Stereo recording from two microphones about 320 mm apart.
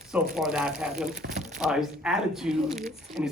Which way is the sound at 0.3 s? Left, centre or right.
Centre.